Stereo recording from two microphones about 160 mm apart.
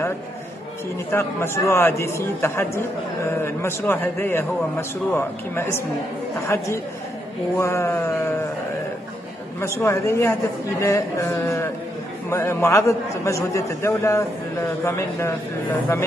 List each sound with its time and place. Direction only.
1.1 s a man's voice: 15° left (ahead or behind)
9.6 s a man's voice: 15° left (ahead or behind)
10.8 s a sound: 20° left (ahead or behind)
12.3 s a man's voice: 15° left (ahead or behind)